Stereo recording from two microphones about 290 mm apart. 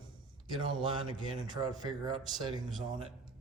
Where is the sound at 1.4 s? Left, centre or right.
Centre.